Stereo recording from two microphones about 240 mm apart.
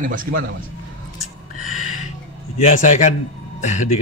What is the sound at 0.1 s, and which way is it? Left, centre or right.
Speech, right.